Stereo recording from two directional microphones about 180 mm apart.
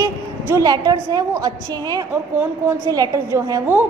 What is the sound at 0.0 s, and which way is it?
A woman's voice, 20° right (ahead or behind).